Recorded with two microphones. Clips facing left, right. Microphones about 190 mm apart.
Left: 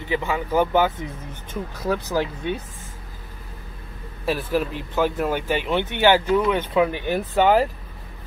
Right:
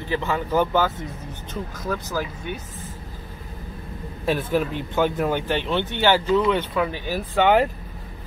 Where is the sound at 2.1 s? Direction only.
25° left (ahead or behind).